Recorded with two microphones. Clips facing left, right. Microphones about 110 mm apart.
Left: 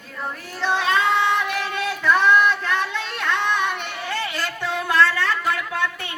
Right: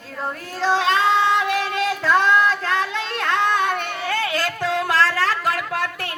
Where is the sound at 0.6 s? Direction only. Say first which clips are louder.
Right 2 dB; 30° right (ahead or behind).